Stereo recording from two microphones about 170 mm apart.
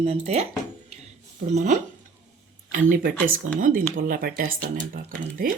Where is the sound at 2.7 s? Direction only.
65° right (ahead or behind).